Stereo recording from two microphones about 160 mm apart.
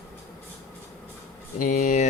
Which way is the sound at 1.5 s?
55° left (ahead or behind).